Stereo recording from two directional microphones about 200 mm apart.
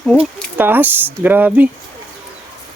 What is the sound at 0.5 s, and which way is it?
Speech, 10° right (ahead or behind).